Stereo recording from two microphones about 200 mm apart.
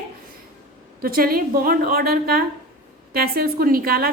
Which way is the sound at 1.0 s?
45° right (ahead or behind).